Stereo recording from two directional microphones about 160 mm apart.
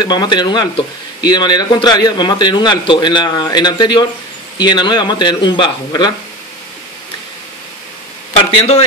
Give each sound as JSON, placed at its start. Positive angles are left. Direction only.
{"t": 0.0, "sound": "a man's voice", "side_deg": 25}
{"t": 8.3, "sound": "a man's voice", "side_deg": 40}